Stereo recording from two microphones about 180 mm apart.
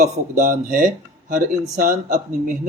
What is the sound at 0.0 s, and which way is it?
Speech, 45° right (ahead or behind).